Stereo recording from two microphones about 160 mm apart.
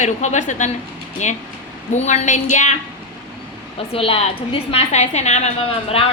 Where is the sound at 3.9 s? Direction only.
35° left (ahead or behind).